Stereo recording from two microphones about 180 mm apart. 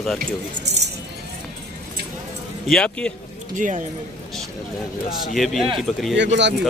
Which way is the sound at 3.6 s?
45° right (ahead or behind).